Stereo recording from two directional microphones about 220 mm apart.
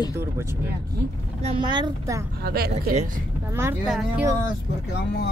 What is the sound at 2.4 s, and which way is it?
Speech, 45° right (ahead or behind).